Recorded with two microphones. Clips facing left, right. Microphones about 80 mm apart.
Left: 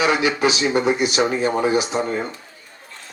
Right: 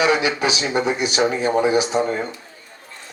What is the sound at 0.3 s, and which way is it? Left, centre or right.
Speech, left.